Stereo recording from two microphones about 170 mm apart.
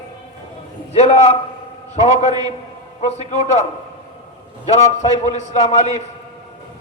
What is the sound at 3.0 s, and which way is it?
Speech, 40° left (ahead or behind).